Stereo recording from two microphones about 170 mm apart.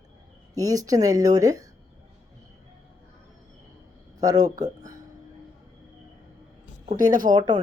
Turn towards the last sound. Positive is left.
turn(degrees=-25)  # may be behind; listen again after turning